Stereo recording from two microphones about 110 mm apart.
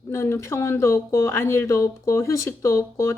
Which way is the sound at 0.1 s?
25° left (ahead or behind).